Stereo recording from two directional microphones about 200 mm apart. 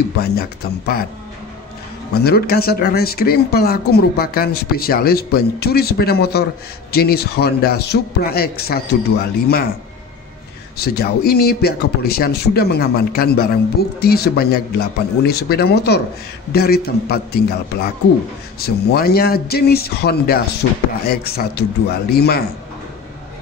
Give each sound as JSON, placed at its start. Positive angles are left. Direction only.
{"t": 0.2, "sound": "speech", "side_deg": 50}
{"t": 2.2, "sound": "speech", "side_deg": 50}
{"t": 10.8, "sound": "speech", "side_deg": 50}